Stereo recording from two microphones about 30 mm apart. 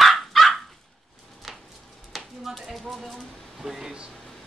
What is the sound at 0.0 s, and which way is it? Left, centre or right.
Dog, centre.